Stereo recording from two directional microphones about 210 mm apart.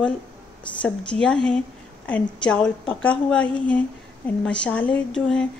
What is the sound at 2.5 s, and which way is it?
Speech, 5° left (ahead or behind).